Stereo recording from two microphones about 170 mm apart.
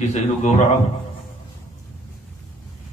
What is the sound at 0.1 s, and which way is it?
Speech, 45° left (ahead or behind).